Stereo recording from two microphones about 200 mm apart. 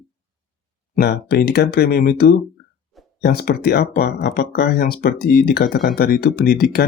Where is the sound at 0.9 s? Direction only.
50° left (ahead or behind).